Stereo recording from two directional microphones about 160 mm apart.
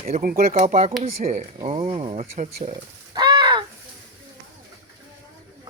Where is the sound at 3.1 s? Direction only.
25° right (ahead or behind).